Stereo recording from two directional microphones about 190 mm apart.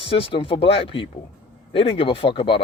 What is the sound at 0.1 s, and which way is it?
A man's voice, 30° left (ahead or behind).